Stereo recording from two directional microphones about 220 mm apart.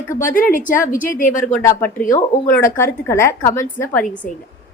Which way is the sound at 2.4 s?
10° left (ahead or behind).